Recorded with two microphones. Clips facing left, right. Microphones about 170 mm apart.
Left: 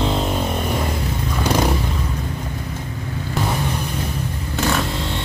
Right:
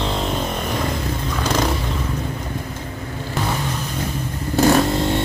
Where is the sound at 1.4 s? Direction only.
10° left (ahead or behind).